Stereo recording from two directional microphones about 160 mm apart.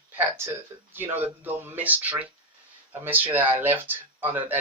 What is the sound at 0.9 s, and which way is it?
Speech, 10° right (ahead or behind).